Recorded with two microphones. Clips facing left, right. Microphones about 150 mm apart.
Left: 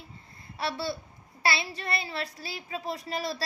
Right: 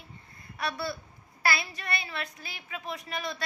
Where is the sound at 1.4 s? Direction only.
30° left (ahead or behind).